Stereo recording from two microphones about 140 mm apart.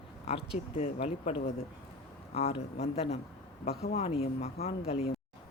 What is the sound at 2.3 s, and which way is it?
Speech, 45° left (ahead or behind).